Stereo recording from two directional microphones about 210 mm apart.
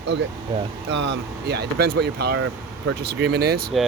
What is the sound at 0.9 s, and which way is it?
Speech, 55° right (ahead or behind).